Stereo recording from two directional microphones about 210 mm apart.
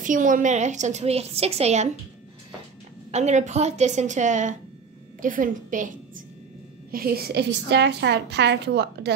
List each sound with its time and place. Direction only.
0.0 s a woman's voice: 40° right (ahead or behind)
3.1 s a woman's voice: 35° right (ahead or behind); by 9.1 s 55° right (ahead or behind)